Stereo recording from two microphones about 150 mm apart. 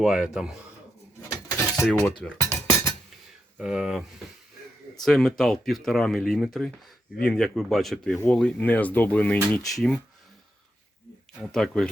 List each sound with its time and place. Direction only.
0.0 s speech: 5° right (ahead or behind)
1.7 s cutlery: 5° left (ahead or behind)
2.4 s cutlery: 20° left (ahead or behind)
3.6 s speech: 5° right (ahead or behind)
5.0 s speech: centre (ahead or behind)
11.4 s speech: 5° left (ahead or behind)